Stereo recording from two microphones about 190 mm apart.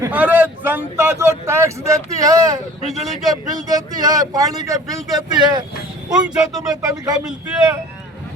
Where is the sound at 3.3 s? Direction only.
20° right (ahead or behind).